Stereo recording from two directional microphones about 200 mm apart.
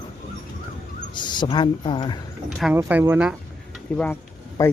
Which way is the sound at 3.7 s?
5° left (ahead or behind).